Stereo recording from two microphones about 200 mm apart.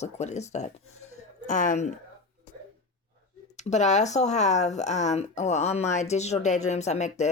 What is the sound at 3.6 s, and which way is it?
Speech, 35° left (ahead or behind).